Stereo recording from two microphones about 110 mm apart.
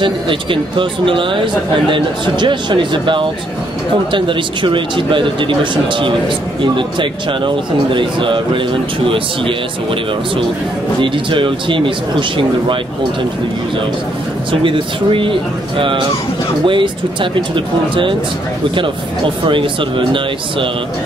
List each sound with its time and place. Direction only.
0.0 s speech: 50° right (ahead or behind)
11.0 s speech: 50° right (ahead or behind)
14.5 s speech: 50° right (ahead or behind)
16.6 s speech: 50° right (ahead or behind)